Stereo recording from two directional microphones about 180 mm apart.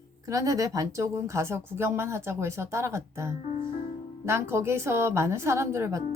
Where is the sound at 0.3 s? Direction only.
20° right (ahead or behind).